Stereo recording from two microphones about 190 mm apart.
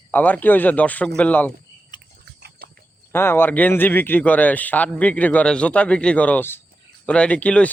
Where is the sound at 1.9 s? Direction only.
25° left (ahead or behind).